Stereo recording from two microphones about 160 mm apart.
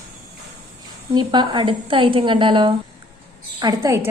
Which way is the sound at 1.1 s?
30° right (ahead or behind).